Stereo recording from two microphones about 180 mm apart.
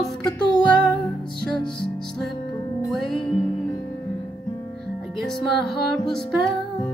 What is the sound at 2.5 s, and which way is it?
Music, 20° left (ahead or behind).